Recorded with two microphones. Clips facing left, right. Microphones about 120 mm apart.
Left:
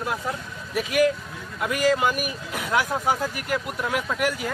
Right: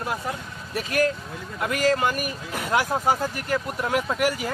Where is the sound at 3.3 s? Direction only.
5° left (ahead or behind).